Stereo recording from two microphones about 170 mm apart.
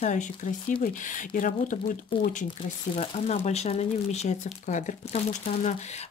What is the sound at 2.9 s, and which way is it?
Speech, 40° left (ahead or behind).